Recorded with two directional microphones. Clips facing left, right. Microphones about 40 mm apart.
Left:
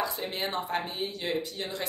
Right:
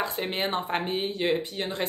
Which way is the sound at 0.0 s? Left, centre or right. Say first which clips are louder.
Right 3 dB; right.